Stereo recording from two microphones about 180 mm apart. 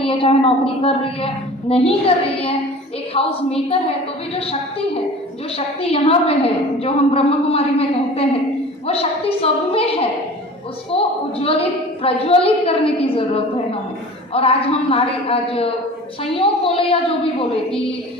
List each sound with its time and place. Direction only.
0.0 s a woman's voice: 30° left (ahead or behind)
5.5 s a woman's voice: 30° left (ahead or behind)